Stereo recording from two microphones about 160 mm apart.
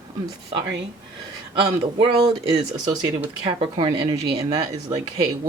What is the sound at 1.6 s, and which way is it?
Speech, 30° right (ahead or behind).